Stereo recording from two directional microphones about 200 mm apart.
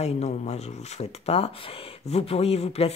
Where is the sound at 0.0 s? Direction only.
35° left (ahead or behind).